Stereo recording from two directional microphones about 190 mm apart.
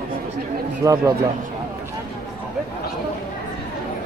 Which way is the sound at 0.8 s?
15° right (ahead or behind).